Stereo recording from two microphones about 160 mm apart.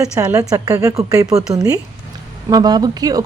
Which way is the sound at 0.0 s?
20° right (ahead or behind).